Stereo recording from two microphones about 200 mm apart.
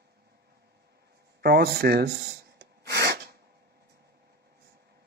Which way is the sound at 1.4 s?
55° right (ahead or behind).